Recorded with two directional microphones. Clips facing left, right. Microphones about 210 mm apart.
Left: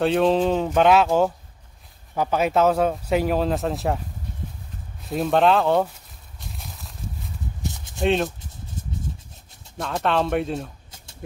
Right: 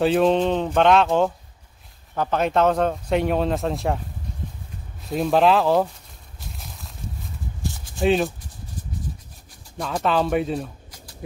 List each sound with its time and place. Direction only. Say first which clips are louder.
0.0 s speech: right 1 dB; centre (ahead or behind)
5.0 s speech: right 1 dB; centre (ahead or behind)
6.4 s a sound: even; centre (ahead or behind)
7.6 s a sound: right 2 dB; 20° left (ahead or behind)
8.0 s speech: right 2 dB; centre (ahead or behind)
9.8 s speech: right 1 dB; centre (ahead or behind)